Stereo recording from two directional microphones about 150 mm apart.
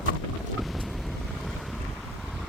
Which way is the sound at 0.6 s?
Centre (ahead or behind).